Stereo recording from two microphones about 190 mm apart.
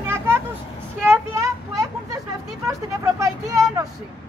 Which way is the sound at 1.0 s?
15° right (ahead or behind).